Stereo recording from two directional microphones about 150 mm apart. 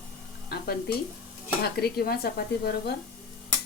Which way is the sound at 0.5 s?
90° left.